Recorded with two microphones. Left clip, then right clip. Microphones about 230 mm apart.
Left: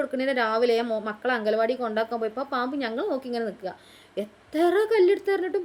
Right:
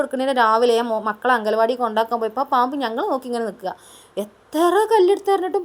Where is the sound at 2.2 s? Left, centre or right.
Right.